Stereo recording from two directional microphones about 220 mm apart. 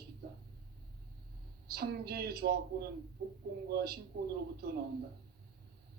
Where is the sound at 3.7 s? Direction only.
45° right (ahead or behind).